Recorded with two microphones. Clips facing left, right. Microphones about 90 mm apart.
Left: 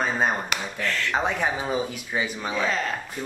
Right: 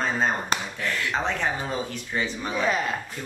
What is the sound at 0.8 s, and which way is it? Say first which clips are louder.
Speech: left 1 dB; 15° right (ahead or behind).